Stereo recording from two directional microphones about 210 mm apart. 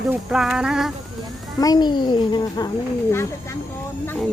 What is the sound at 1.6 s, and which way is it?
A child's voice, 20° left (ahead or behind).